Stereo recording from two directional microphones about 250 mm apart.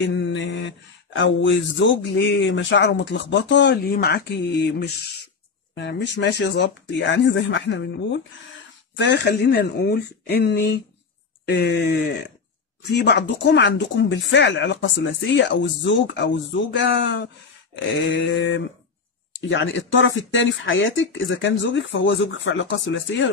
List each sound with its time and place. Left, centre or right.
0.0 s speech: left
12.9 s speech: left